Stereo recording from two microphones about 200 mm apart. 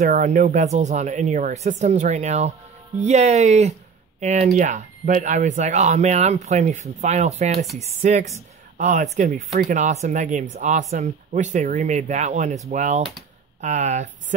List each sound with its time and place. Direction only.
0.0 s speech: 40° right (ahead or behind)